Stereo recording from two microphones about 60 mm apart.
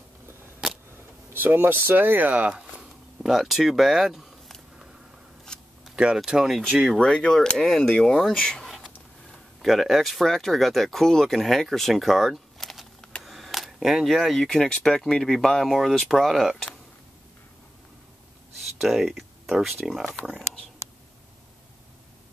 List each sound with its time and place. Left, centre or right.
1.3 s speech: right
2.5 s a sound: centre
5.5 s a sound: centre
5.9 s speech: centre
6.9 s speech: centre
8.6 s speech: centre
18.8 s speech: centre